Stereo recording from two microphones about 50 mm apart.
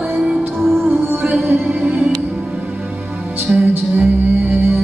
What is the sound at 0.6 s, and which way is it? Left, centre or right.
Music, centre.